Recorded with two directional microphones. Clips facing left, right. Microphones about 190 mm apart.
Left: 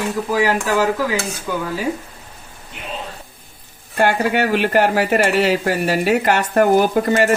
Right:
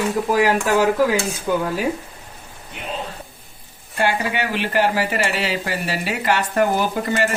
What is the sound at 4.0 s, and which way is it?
Speech, 50° left (ahead or behind).